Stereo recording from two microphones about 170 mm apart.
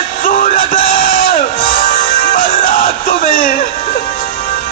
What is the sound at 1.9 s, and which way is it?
Music, 55° left (ahead or behind).